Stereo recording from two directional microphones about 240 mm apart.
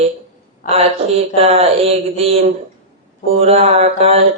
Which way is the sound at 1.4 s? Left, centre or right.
Right.